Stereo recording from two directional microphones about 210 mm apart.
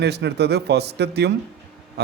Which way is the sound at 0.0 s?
50° right (ahead or behind).